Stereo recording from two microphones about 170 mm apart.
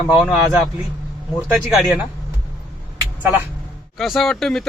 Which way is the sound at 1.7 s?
5° right (ahead or behind).